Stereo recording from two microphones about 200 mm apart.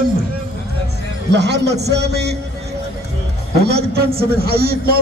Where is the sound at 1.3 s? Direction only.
60° right (ahead or behind).